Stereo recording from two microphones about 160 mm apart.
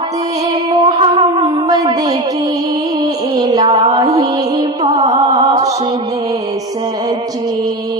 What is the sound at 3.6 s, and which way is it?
Mantra, 40° right (ahead or behind).